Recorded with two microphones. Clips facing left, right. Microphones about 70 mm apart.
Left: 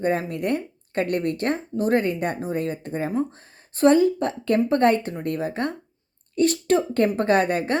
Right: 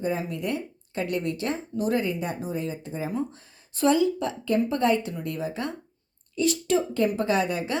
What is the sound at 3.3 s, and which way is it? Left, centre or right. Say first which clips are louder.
A woman's voice: left 2 dB; left.